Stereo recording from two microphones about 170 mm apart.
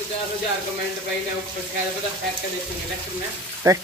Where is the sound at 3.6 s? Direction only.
20° right (ahead or behind).